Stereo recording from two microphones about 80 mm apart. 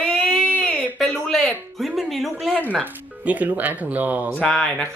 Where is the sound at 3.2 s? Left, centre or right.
Centre.